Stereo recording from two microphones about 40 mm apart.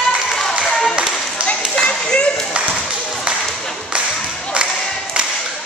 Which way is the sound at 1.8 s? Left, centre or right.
Left.